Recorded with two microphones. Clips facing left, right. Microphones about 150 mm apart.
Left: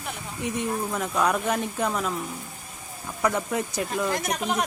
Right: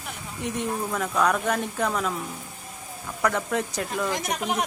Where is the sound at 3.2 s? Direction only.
5° left (ahead or behind).